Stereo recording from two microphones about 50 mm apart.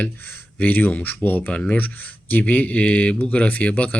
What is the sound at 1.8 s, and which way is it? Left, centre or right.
Speech, left.